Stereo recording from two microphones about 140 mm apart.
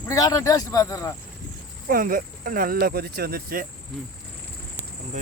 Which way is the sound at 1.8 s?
85° right.